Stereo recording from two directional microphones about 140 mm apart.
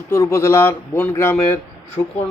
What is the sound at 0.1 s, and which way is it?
Speech, 20° left (ahead or behind).